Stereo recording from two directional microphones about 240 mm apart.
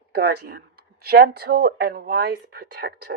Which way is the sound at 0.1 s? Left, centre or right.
Right.